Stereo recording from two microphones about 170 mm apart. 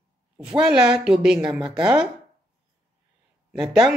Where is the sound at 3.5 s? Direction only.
5° right (ahead or behind).